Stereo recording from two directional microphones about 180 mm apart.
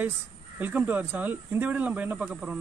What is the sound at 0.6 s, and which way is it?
Speech, 10° right (ahead or behind).